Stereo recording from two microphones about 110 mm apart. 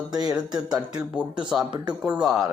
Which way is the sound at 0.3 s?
10° right (ahead or behind).